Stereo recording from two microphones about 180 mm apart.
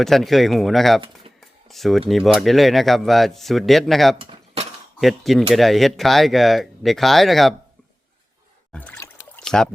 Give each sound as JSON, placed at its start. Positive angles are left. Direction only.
{"t": 0.0, "sound": "speech", "side_deg": 0}
{"t": 4.2, "sound": "cutlery", "side_deg": -30}
{"t": 4.9, "sound": "speech", "side_deg": 0}
{"t": 8.7, "sound": "a sound", "side_deg": 10}